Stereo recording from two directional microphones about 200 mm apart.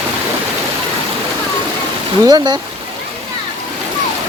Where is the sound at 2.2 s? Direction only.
20° right (ahead or behind).